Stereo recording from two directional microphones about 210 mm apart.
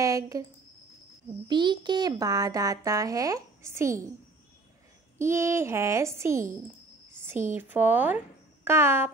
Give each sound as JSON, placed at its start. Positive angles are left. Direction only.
{"t": 0.0, "sound": "speech", "side_deg": -15}
{"t": 1.5, "sound": "a child's voice", "side_deg": -20}
{"t": 5.2, "sound": "a child's voice", "side_deg": -10}
{"t": 7.5, "sound": "a child's voice", "side_deg": -10}